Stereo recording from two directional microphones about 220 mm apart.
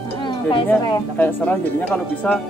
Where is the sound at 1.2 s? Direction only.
10° left (ahead or behind).